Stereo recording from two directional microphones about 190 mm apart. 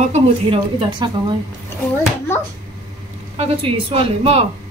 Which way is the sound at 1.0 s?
25° right (ahead or behind).